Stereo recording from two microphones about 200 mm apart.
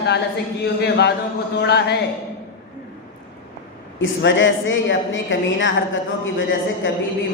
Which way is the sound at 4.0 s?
70° left (ahead or behind).